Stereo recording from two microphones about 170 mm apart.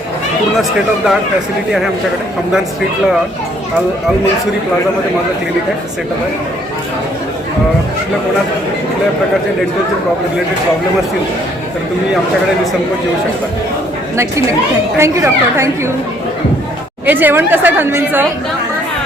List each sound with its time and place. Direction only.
14.9 s a woman's voice: 15° right (ahead or behind)
17.1 s a woman's voice: 10° right (ahead or behind)